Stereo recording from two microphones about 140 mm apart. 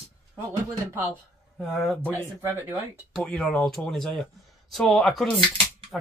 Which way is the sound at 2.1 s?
20° right (ahead or behind).